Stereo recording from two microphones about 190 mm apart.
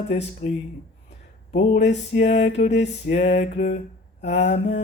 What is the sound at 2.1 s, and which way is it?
Mantra, 40° left (ahead or behind).